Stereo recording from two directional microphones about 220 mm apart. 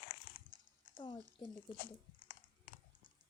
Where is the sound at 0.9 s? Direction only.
20° left (ahead or behind).